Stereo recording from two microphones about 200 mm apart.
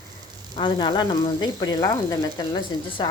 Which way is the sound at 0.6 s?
25° left (ahead or behind).